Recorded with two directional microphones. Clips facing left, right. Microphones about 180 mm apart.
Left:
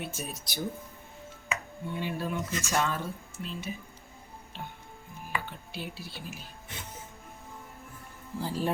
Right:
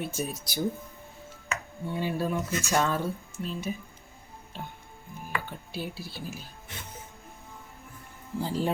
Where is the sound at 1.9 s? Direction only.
40° right (ahead or behind).